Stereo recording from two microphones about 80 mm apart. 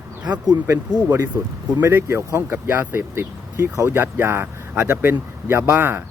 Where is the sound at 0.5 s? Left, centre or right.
Right.